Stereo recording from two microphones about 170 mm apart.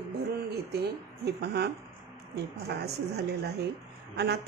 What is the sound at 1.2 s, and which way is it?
A woman's voice, 75° right (ahead or behind).